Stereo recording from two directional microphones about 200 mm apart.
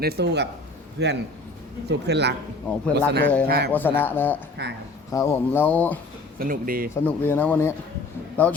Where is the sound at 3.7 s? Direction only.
10° left (ahead or behind).